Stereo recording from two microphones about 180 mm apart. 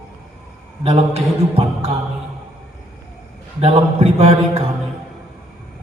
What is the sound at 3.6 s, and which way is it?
A man's voice, 35° right (ahead or behind).